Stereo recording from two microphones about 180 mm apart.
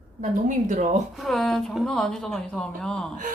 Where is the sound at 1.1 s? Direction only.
Centre (ahead or behind).